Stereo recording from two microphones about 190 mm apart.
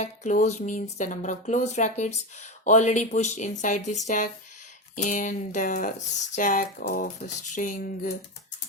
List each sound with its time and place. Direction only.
0.0 s speech: 40° left (ahead or behind)